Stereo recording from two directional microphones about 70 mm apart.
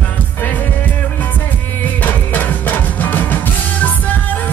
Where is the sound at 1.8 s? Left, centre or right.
Left.